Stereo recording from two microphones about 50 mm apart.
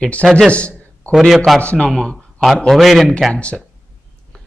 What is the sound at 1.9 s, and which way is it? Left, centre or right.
Speech, centre.